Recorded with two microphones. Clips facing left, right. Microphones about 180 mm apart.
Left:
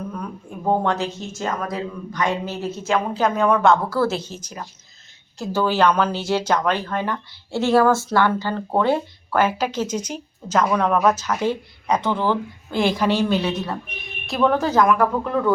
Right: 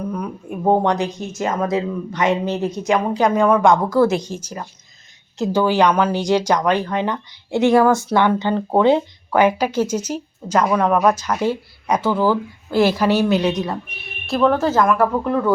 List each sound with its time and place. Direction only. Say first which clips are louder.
0.1 s a woman's voice: right 5 dB; 20° right (ahead or behind)
14.3 s speech: right 3 dB; centre (ahead or behind)